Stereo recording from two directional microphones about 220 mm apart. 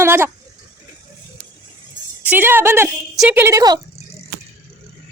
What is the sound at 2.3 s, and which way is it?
Speech, 10° right (ahead or behind).